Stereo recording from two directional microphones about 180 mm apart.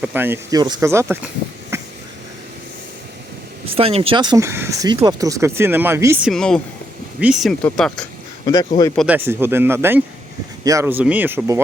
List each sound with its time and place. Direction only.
0.0 s speech: 10° right (ahead or behind)
1.7 s a sound: 15° right (ahead or behind)
3.8 s speech: 35° right (ahead or behind); by 6.1 s 15° right (ahead or behind)
6.2 s speech: centre (ahead or behind)
9.0 s speech: 10° right (ahead or behind)